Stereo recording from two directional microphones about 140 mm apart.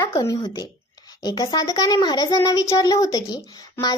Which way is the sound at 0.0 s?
25° left (ahead or behind).